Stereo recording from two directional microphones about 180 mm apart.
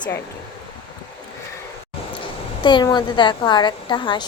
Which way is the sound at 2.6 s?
25° left (ahead or behind).